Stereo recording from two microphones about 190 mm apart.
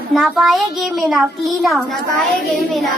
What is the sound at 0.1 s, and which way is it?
A woman's voice, centre (ahead or behind).